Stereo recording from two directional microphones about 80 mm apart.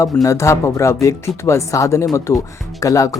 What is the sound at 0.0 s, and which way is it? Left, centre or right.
Speech, left.